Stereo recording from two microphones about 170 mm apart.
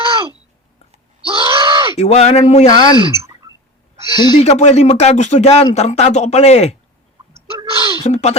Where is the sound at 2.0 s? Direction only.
40° left (ahead or behind).